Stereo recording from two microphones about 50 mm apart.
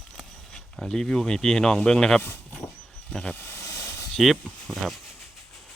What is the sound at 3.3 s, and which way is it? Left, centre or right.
Speech, left.